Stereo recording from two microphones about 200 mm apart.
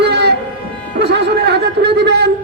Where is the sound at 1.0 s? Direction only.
55° right (ahead or behind).